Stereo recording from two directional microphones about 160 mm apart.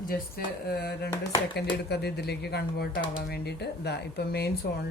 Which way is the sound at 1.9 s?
90° left.